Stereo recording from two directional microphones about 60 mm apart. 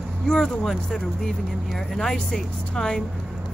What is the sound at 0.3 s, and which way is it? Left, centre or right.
Speech, centre.